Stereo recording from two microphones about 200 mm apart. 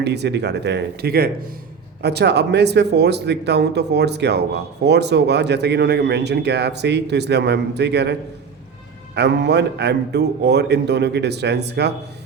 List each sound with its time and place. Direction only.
0.0 s speech: 55° right (ahead or behind)
9.1 s speech: 55° right (ahead or behind)